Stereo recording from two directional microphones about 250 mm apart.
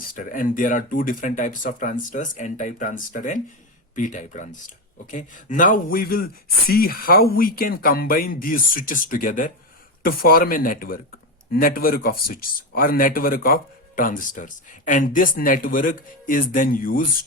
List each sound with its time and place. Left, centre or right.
0.3 s speech: left